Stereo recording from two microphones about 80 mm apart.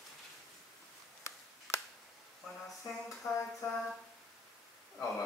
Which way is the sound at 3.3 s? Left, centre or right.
Left.